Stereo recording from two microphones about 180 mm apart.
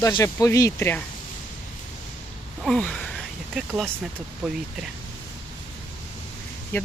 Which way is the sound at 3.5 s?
Centre (ahead or behind).